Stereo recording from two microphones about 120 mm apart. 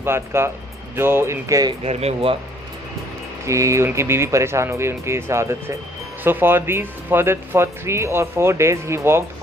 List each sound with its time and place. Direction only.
0.0 s speech: 20° right (ahead or behind)
1.8 s speech: 60° right (ahead or behind)
3.4 s speech: 25° right (ahead or behind)